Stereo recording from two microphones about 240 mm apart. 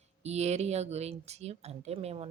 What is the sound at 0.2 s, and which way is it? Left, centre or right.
Speech, right.